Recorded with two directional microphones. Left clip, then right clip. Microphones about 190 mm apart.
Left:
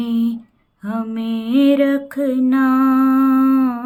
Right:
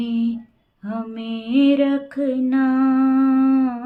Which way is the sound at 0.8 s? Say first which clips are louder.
Left 4 dB; 30° left (ahead or behind).